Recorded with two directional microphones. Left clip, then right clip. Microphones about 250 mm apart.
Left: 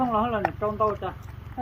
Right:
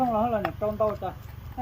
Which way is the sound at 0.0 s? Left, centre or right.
Right.